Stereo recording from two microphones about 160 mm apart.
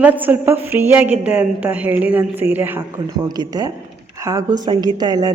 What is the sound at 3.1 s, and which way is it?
A woman's voice, 25° right (ahead or behind).